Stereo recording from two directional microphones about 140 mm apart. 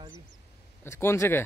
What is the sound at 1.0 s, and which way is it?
Speech, 20° left (ahead or behind).